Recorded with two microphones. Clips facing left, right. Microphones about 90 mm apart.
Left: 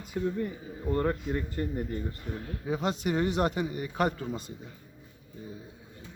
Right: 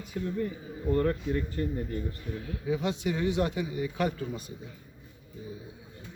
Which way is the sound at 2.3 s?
30° left (ahead or behind).